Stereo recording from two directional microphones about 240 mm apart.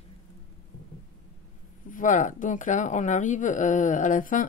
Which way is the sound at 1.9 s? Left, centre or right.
Left.